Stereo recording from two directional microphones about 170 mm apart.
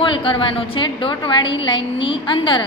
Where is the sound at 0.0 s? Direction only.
30° left (ahead or behind).